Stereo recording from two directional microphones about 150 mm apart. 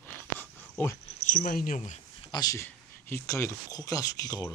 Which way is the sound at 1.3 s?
70° left (ahead or behind).